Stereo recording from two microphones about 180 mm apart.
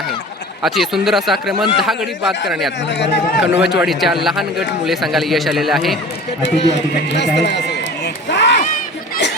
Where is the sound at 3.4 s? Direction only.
5° right (ahead or behind).